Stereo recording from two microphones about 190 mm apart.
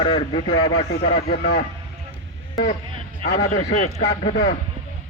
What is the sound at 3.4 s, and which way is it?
Speech, 40° left (ahead or behind).